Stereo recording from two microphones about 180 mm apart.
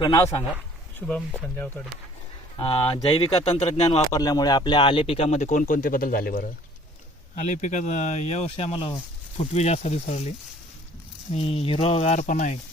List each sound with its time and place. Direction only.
0.0 s a man's voice: 20° left (ahead or behind)
0.9 s speech: 5° left (ahead or behind)
2.6 s speech: 25° left (ahead or behind)
4.1 s speech: 20° left (ahead or behind); by 6.5 s 55° left (ahead or behind)
7.3 s speech: 45° left (ahead or behind)